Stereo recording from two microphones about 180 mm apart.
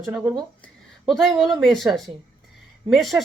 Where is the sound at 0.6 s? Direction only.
Centre (ahead or behind).